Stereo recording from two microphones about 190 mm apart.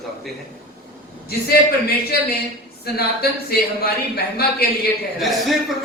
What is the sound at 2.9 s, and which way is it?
Speech, 55° left (ahead or behind).